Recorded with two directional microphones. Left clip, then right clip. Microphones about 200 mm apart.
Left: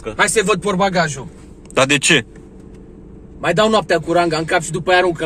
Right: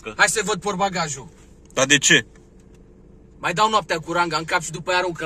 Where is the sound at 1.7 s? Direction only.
Centre (ahead or behind).